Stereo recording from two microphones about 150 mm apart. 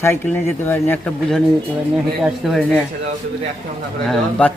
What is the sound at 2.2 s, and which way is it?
Speech, centre (ahead or behind).